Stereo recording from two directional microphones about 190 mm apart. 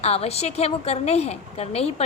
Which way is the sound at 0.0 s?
35° left (ahead or behind).